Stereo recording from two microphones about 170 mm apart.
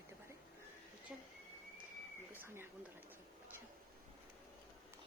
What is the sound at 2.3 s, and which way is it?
Speech, 15° right (ahead or behind).